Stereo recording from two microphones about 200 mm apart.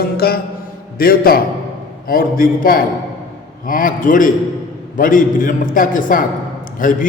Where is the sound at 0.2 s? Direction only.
50° left (ahead or behind).